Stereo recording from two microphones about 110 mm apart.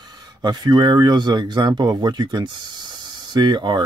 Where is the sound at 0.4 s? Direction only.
40° right (ahead or behind).